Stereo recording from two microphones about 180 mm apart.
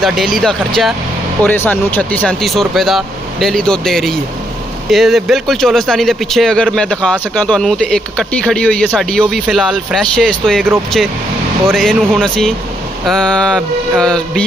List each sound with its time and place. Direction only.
0.0 s speech: centre (ahead or behind)